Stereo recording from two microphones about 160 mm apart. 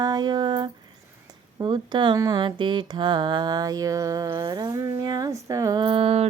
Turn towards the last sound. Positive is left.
turn(degrees=-40)  # may be behind; listen again after turning